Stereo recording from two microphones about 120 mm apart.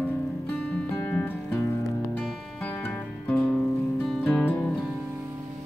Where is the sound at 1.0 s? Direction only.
10° left (ahead or behind).